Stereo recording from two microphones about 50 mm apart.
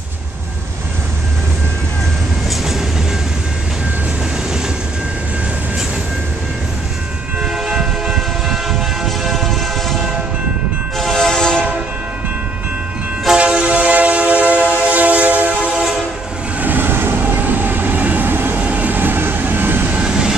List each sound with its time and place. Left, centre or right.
2.5 s train: centre
7.3 s train: centre
13.3 s train: centre
16.5 s vehicle: right
17.2 s train: right
18.6 s vehicle: right
20.0 s vehicle: centre